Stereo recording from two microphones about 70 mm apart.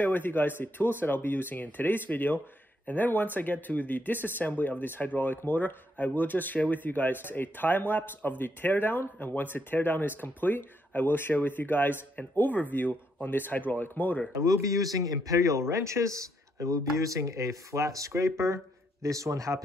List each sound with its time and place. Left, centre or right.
0.0 s speech: left
14.3 s speech: right